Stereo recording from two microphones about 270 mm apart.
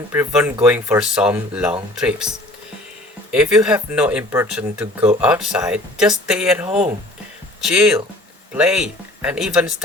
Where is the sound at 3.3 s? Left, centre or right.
Centre.